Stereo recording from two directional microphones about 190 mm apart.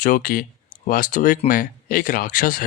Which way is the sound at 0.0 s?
45° left (ahead or behind).